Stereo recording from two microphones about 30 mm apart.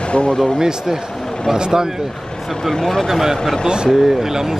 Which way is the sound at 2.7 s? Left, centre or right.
Centre.